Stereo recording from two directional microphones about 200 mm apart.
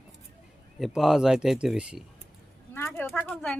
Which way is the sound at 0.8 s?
Centre (ahead or behind).